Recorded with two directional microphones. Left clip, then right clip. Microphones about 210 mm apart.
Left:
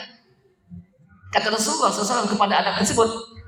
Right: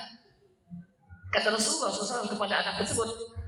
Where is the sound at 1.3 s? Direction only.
40° left (ahead or behind).